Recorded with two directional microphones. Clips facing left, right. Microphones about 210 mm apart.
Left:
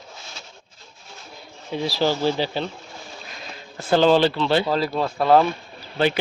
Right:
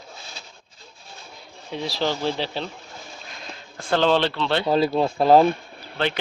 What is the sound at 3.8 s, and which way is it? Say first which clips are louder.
Speech: left 4 dB; 5° left (ahead or behind).